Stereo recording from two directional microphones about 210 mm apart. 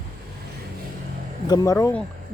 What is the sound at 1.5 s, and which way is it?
Speech, 15° left (ahead or behind).